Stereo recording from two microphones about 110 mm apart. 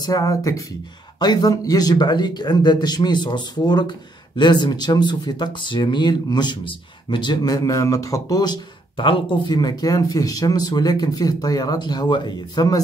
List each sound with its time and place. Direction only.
0.0 s speech: 35° left (ahead or behind)
8.9 s speech: 50° left (ahead or behind)